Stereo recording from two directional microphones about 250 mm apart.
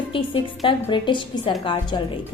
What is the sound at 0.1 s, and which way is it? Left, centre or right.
A woman's voice, centre.